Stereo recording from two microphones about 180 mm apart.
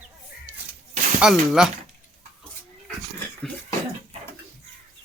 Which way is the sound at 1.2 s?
5° right (ahead or behind).